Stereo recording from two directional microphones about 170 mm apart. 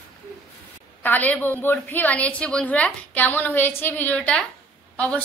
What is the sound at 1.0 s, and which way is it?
A woman's voice, 10° left (ahead or behind).